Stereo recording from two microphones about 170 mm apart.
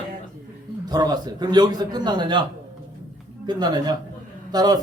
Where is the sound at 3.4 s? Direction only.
25° right (ahead or behind).